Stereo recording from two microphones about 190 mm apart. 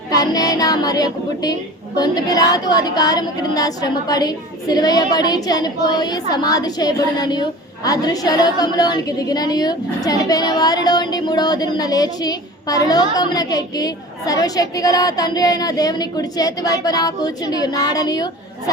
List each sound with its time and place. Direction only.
0.1 s a woman's voice: 20° left (ahead or behind)